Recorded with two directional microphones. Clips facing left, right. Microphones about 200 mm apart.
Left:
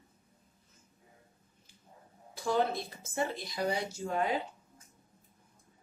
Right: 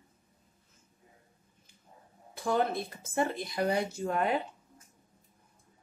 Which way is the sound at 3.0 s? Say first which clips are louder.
Right 4 dB; 55° right (ahead or behind).